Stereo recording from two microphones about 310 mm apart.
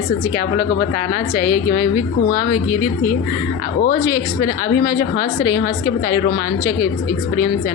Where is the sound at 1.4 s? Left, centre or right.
Centre.